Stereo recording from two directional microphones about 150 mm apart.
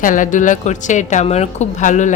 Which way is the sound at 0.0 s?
60° left (ahead or behind).